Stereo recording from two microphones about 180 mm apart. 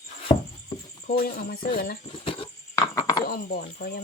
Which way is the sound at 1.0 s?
55° left (ahead or behind).